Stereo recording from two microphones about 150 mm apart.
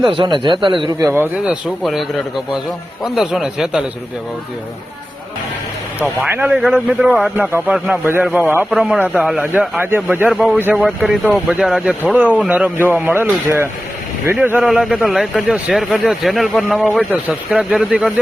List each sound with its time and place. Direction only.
0.1 s a man's voice: 35° right (ahead or behind)
1.0 s a man's voice: 15° right (ahead or behind)
6.0 s speech: 10° right (ahead or behind)
6.7 s a man's voice: 5° left (ahead or behind)
7.0 s a man's voice: 5° right (ahead or behind)
10.3 s a man's voice: centre (ahead or behind)
10.6 s speech: 10° right (ahead or behind)
10.8 s a man's voice: centre (ahead or behind)